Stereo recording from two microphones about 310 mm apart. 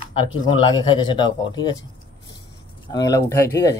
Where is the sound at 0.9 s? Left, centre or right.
Centre.